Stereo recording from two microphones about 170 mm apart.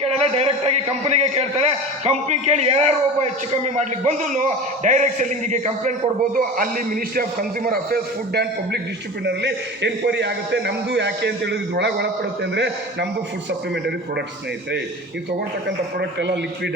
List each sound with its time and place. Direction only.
0.0 s a man's voice: 35° right (ahead or behind); by 8.8 s 70° right (ahead or behind)
9.2 s a man's voice: 85° right
16.0 s a man's voice: 85° right